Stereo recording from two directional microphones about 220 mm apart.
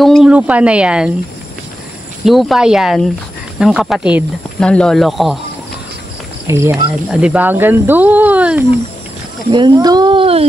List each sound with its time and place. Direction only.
0.0 s speech: centre (ahead or behind)
2.2 s speech: centre (ahead or behind)
6.4 s speech: 10° right (ahead or behind)
9.5 s speech: 20° right (ahead or behind)